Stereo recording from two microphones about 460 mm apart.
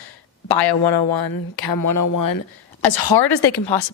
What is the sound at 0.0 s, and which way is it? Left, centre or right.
A woman's voice, left.